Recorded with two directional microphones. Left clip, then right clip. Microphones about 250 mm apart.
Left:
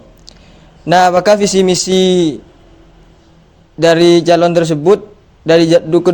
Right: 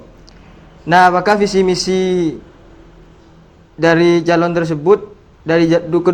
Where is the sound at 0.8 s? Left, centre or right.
Left.